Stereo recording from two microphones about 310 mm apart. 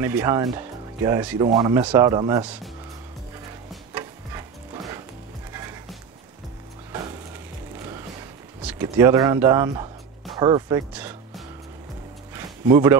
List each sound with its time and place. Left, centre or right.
0.0 s speech: centre
3.9 s music: centre
5.5 s music: centre
7.8 s a sound: centre